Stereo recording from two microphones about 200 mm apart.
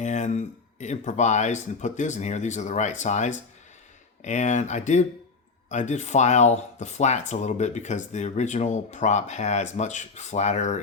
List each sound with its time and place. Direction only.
0.0 s speech: 35° left (ahead or behind)